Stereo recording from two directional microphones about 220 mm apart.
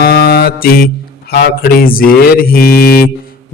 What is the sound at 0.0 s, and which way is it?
Mantra, 45° left (ahead or behind).